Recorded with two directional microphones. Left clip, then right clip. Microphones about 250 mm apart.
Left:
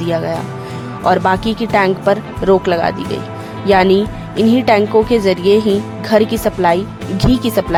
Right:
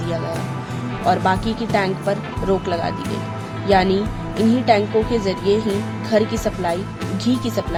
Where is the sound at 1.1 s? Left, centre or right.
Left.